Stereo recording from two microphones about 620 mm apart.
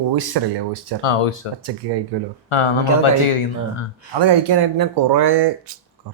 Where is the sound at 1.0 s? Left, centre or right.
Left.